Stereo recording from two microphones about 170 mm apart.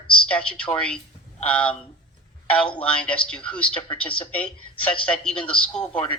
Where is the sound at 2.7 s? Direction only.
5° left (ahead or behind).